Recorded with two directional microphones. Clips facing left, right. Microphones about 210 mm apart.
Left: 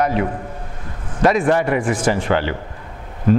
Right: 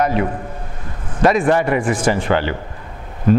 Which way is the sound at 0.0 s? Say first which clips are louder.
Right 1 dB; 15° right (ahead or behind).